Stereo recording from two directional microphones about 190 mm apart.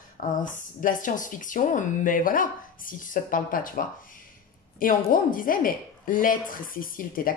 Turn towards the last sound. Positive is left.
turn(degrees=50)  # may be behind; listen again after turning